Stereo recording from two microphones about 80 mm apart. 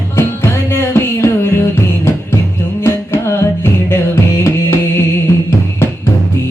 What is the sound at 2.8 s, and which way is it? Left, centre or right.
Music, left.